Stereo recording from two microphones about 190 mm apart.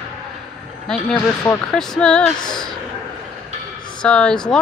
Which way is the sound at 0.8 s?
5° left (ahead or behind).